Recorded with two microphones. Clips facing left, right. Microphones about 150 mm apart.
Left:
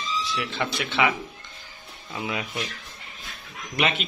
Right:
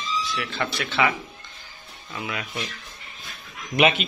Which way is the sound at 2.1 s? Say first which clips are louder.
Left 2 dB; 20° left (ahead or behind).